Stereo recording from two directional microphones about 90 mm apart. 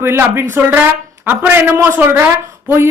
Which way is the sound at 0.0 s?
25° right (ahead or behind).